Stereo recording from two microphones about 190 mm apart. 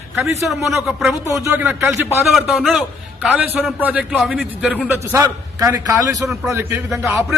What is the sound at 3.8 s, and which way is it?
A man's voice, 5° right (ahead or behind).